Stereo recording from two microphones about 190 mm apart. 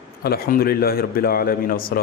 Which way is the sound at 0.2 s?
50° left (ahead or behind).